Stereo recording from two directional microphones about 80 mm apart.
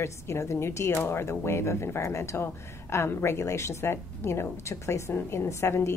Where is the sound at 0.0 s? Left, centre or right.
Left.